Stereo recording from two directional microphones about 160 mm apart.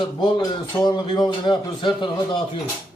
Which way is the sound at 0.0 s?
30° left (ahead or behind).